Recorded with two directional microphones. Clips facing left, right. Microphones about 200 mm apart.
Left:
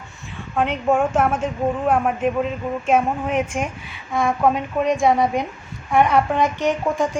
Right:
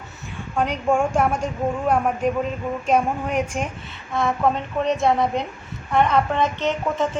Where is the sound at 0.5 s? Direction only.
5° left (ahead or behind).